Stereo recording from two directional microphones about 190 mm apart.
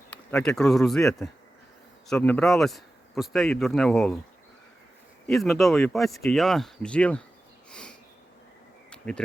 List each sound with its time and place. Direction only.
0.1 s speech: 5° left (ahead or behind)
5.2 s speech: centre (ahead or behind)
7.7 s a sound: 5° left (ahead or behind)
8.9 s insect: 5° left (ahead or behind)